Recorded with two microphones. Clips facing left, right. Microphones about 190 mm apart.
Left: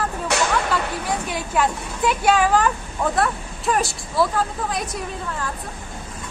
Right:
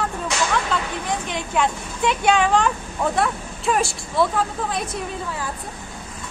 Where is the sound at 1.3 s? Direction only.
5° left (ahead or behind).